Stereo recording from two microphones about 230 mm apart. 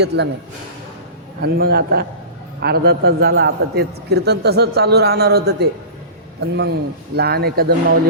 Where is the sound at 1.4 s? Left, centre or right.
Right.